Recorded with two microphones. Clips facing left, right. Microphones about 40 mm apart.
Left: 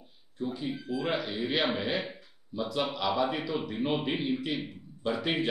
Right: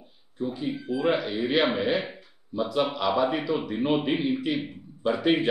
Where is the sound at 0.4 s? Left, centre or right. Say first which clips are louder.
Right 4 dB; centre.